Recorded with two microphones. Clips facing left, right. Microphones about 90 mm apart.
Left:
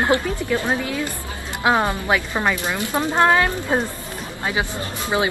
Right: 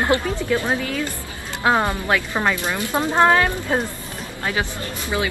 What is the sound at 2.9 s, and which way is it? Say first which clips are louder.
Speech: right 1 dB; 15° right (ahead or behind).